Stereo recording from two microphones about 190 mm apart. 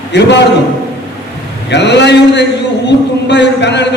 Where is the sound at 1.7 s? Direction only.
65° left (ahead or behind).